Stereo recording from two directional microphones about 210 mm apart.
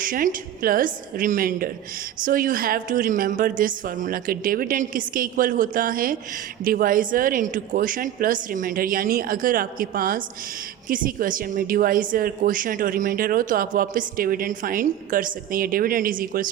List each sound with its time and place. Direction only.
0.0 s a woman's voice: 40° right (ahead or behind)